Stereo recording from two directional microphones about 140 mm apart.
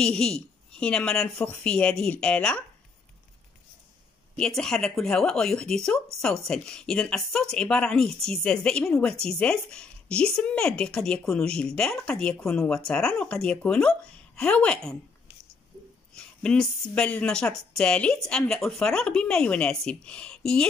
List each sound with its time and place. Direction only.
0.0 s a man's voice: 5° left (ahead or behind)
4.4 s speech: 5° left (ahead or behind)
16.2 s a sound: 5° left (ahead or behind)
16.9 s speech: 10° left (ahead or behind)